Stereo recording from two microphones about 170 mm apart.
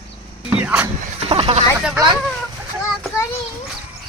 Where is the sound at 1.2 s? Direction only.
35° right (ahead or behind).